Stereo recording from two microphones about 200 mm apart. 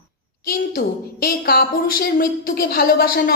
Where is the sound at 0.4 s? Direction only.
50° left (ahead or behind).